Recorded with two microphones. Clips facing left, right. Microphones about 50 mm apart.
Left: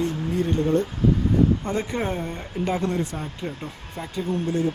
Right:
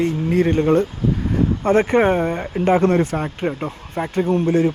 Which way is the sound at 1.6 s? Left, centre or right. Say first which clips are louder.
Right 11 dB; right.